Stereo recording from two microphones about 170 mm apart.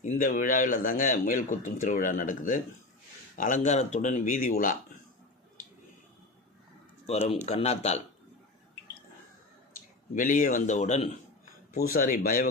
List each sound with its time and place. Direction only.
0.0 s speech: 45° left (ahead or behind)
7.1 s speech: 40° left (ahead or behind)
10.2 s speech: 50° left (ahead or behind)
11.8 s speech: 55° left (ahead or behind)